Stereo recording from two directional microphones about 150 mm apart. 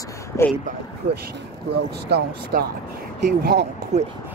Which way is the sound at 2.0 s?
90° right.